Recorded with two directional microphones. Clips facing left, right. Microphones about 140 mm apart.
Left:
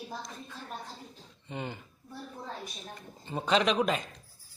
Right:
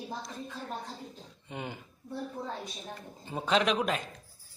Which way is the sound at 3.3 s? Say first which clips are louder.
Left 1 dB; centre (ahead or behind).